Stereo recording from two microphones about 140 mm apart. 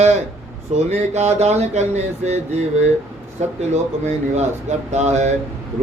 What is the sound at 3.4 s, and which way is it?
Speech, 55° right (ahead or behind).